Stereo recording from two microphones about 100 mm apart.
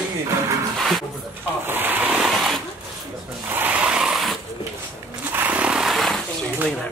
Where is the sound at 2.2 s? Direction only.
5° right (ahead or behind).